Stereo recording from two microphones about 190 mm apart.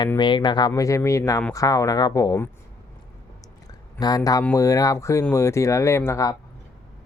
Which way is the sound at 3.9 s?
20° left (ahead or behind).